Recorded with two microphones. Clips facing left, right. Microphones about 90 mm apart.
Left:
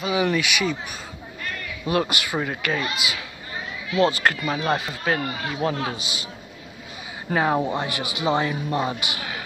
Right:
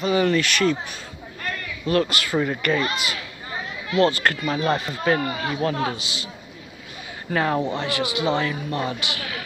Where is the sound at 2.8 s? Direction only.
40° right (ahead or behind).